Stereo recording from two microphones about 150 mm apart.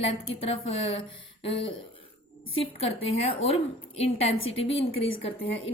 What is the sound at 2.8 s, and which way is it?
A woman's voice, 40° left (ahead or behind).